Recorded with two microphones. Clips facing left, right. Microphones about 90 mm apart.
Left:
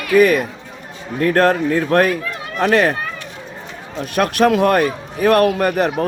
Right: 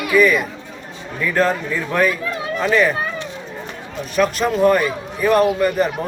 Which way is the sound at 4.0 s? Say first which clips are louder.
Left 3 dB; 60° left (ahead or behind).